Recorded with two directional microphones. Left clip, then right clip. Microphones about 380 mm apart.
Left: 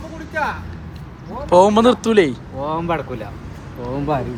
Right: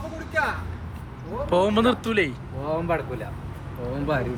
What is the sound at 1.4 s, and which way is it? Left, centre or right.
Speech, centre.